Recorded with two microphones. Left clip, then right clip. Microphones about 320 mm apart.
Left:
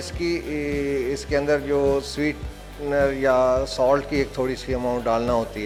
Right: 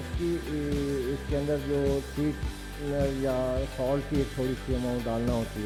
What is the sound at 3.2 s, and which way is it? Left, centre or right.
Speech, centre.